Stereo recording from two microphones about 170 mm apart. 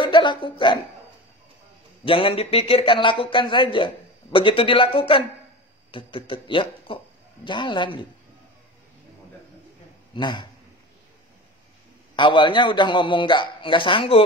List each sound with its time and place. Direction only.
0.0 s a man's voice: 30° left (ahead or behind)
2.0 s a man's voice: 30° left (ahead or behind)
10.1 s a man's voice: 25° left (ahead or behind)
12.2 s a man's voice: 30° left (ahead or behind)